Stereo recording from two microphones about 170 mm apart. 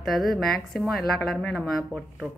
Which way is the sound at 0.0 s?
Centre (ahead or behind).